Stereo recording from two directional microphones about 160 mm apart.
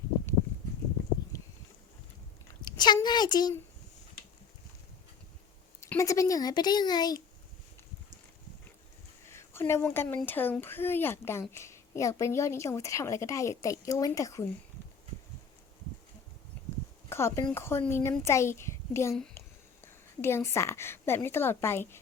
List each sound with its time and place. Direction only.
2.6 s a woman's voice: 25° left (ahead or behind)
5.8 s a woman's voice: 20° left (ahead or behind)
9.3 s a woman's voice: 15° left (ahead or behind)
17.1 s speech: 15° left (ahead or behind)
19.4 s a sound: 15° left (ahead or behind)
19.8 s a woman's voice: 15° left (ahead or behind)